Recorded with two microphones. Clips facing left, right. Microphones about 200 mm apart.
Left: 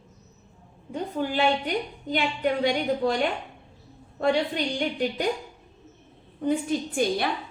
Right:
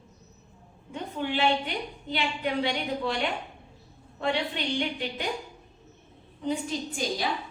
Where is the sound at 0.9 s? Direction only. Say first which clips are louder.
Left 3 dB; 40° left (ahead or behind).